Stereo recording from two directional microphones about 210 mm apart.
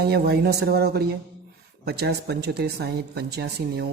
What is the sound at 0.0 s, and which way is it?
Speech, 50° right (ahead or behind).